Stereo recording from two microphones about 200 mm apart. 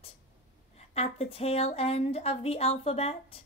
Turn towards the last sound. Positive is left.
turn(degrees=30)  # may be behind; listen again after turning